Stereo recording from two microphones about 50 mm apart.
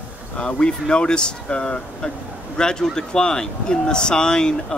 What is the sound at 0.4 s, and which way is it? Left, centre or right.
Speech, left.